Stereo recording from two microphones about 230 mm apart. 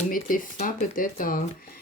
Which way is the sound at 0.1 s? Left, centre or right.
Left.